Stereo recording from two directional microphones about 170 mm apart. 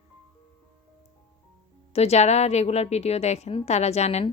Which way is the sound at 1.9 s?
40° left (ahead or behind).